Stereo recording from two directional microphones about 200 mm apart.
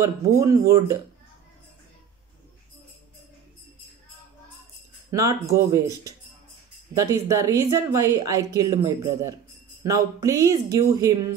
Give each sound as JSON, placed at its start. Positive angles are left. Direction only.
{"t": 0.0, "sound": "a woman's voice", "side_deg": -15}
{"t": 5.1, "sound": "a woman's voice", "side_deg": -15}